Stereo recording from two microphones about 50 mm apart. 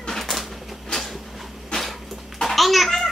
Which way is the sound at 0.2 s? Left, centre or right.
Centre.